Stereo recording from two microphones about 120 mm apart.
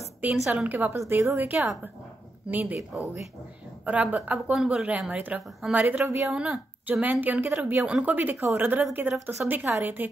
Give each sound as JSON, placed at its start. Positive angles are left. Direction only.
{"t": 0.2, "sound": "a woman's voice", "side_deg": -10}
{"t": 3.8, "sound": "a woman's voice", "side_deg": -10}
{"t": 6.3, "sound": "a woman's voice", "side_deg": -5}